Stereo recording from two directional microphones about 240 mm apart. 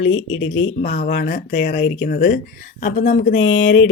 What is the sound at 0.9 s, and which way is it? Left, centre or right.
Speech, left.